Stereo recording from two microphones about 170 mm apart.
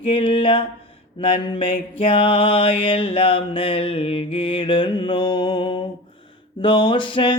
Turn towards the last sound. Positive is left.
turn(degrees=30)  # may be behind; listen again after turning